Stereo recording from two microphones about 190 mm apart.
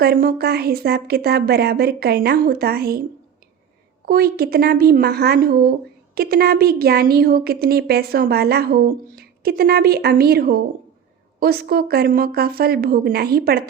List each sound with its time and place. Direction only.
0.0 s a woman's voice: 50° right (ahead or behind)
4.0 s a woman's voice: 55° right (ahead or behind)